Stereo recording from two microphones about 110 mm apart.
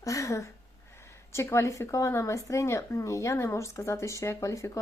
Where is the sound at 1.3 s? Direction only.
25° left (ahead or behind).